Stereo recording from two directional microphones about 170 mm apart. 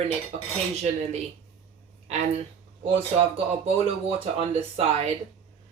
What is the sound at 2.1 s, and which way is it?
Cutlery, 40° right (ahead or behind).